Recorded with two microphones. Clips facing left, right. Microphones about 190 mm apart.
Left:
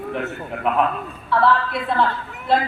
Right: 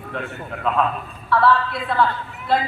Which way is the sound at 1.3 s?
25° left (ahead or behind).